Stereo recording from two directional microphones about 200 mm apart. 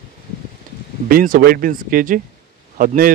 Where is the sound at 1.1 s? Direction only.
45° right (ahead or behind).